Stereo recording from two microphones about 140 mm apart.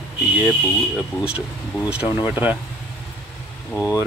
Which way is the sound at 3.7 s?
20° left (ahead or behind).